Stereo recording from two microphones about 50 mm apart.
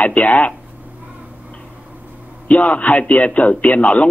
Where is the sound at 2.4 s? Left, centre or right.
Left.